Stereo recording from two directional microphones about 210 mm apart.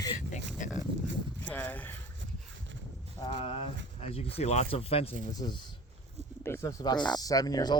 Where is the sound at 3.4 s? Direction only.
25° left (ahead or behind).